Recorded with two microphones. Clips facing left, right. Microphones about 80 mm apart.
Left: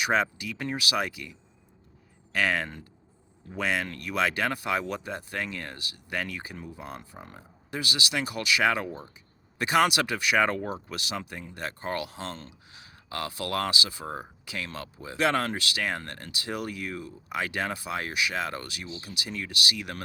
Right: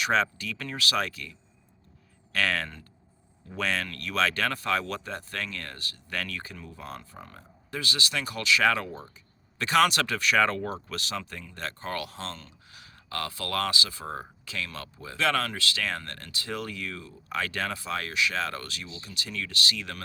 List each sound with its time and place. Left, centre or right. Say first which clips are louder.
0.0 s speech: even; centre